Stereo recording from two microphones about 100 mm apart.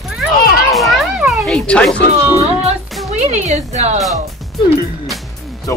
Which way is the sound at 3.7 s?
90° right.